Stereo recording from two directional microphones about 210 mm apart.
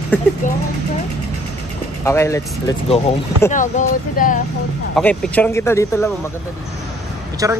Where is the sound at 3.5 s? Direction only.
35° left (ahead or behind).